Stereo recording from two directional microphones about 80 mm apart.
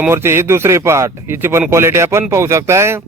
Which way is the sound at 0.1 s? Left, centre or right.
Right.